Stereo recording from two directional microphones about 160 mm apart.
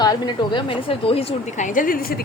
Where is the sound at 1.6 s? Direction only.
55° left (ahead or behind).